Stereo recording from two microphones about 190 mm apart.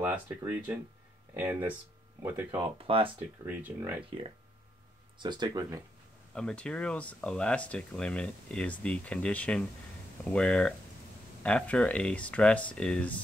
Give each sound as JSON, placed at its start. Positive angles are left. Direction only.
{"t": 0.0, "sound": "speech", "side_deg": -10}
{"t": 2.5, "sound": "speech", "side_deg": -30}
{"t": 3.4, "sound": "speech", "side_deg": -10}
{"t": 5.2, "sound": "speech", "side_deg": -25}
{"t": 6.3, "sound": "speech", "side_deg": 5}